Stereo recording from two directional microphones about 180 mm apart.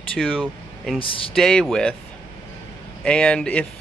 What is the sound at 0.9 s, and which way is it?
Speech, 30° left (ahead or behind).